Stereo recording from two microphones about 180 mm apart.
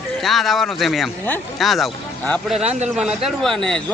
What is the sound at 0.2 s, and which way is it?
Speech, centre (ahead or behind).